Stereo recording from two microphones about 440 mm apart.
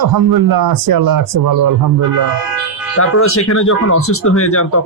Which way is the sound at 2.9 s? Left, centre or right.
Left.